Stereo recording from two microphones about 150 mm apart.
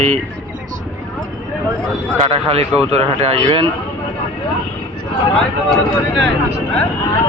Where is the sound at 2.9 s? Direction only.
45° right (ahead or behind).